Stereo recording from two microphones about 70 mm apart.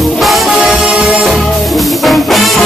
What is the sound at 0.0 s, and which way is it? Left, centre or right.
Music, centre.